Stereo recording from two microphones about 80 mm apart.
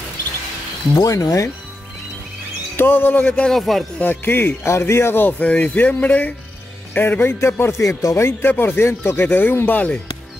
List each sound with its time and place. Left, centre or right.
0.9 s speech: left
2.7 s a man's voice: left
3.3 s speech: centre
3.5 s speech: centre
4.0 s speech: left